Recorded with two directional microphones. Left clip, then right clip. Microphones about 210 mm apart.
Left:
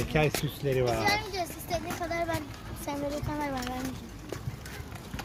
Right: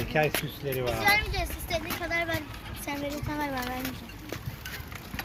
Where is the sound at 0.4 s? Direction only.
45° left (ahead or behind).